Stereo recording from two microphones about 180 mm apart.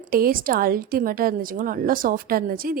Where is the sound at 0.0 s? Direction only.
55° right (ahead or behind).